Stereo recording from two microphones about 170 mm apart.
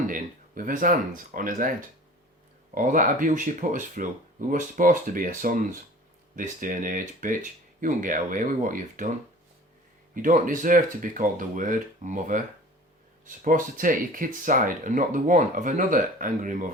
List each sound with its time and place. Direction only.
0.1 s speech: 55° right (ahead or behind)
2.7 s speech: 50° right (ahead or behind)
10.2 s speech: 50° right (ahead or behind)